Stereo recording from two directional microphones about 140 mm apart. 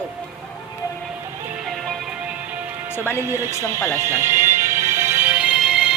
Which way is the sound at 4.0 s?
15° right (ahead or behind).